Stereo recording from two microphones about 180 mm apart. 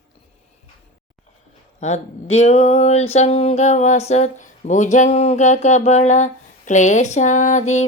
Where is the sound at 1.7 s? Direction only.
40° left (ahead or behind).